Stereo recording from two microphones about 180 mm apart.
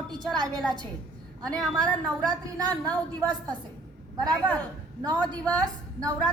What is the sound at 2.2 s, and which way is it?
A woman's voice, 20° right (ahead or behind).